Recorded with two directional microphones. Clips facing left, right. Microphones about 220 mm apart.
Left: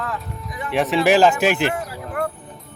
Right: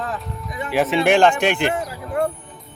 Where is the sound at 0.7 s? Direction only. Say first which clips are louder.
Even; centre (ahead or behind).